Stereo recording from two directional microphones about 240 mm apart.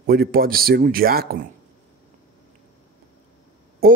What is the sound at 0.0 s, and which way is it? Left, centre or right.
A man's voice, right.